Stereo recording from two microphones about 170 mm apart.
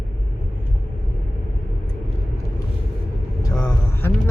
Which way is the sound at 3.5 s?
15° left (ahead or behind).